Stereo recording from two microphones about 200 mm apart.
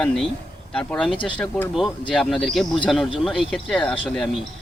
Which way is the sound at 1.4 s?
5° left (ahead or behind).